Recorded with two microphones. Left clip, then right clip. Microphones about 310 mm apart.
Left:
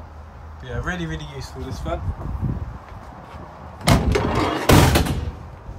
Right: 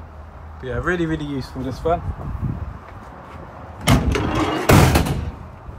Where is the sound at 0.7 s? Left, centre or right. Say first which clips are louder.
Right 7 dB; centre.